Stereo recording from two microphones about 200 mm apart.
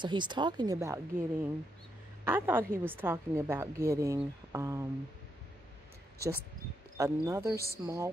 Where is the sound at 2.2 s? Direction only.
10° right (ahead or behind).